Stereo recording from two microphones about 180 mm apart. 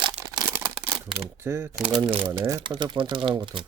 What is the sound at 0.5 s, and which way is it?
Crumpling, 10° right (ahead or behind).